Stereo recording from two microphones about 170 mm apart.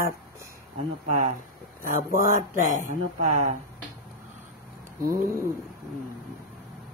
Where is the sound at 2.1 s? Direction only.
50° right (ahead or behind).